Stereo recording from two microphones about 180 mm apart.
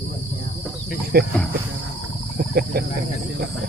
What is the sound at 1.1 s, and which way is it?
Speech, 65° right (ahead or behind).